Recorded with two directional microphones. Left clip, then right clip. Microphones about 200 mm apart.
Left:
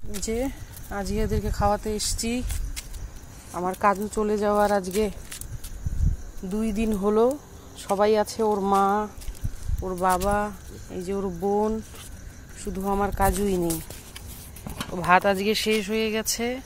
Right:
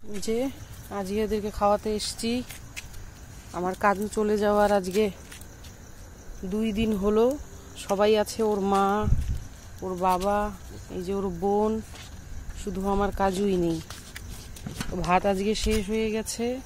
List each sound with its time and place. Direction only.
0.2 s speech: centre (ahead or behind)
3.5 s speech: centre (ahead or behind)
6.5 s speech: 10° left (ahead or behind)
9.8 s speech: 20° left (ahead or behind); by 13.7 s 5° right (ahead or behind)
15.0 s speech: 10° right (ahead or behind)